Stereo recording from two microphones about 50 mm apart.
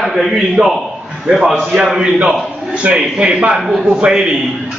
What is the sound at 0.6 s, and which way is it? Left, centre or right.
A man's voice, centre.